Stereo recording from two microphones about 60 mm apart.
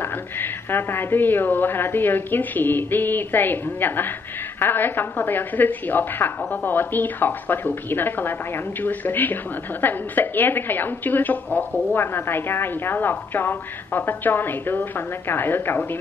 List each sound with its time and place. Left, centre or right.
0.0 s a woman's voice: left